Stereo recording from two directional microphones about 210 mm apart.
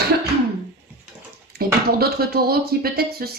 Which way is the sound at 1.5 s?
45° right (ahead or behind).